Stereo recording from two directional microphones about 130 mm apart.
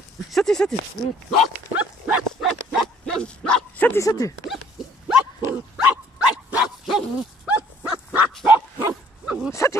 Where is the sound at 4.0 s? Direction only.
25° left (ahead or behind).